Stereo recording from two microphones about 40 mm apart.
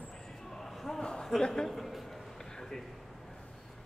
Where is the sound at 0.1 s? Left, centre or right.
Centre.